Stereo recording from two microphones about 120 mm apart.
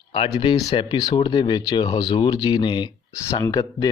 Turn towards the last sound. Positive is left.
turn(degrees=35)  # may be behind; listen again after turning